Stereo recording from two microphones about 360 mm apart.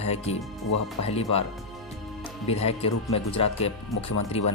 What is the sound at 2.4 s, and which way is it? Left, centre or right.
Speech, centre.